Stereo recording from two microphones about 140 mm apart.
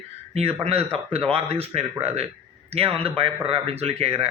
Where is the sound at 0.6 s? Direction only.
45° right (ahead or behind).